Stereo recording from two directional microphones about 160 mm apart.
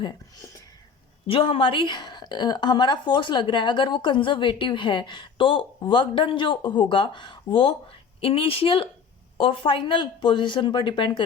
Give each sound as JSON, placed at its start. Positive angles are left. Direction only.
{"t": 1.3, "sound": "a woman's voice", "side_deg": 35}